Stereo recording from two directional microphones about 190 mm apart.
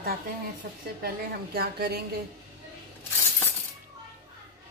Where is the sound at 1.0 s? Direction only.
55° right (ahead or behind).